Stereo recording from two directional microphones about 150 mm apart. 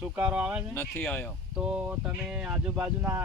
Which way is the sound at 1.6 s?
5° right (ahead or behind).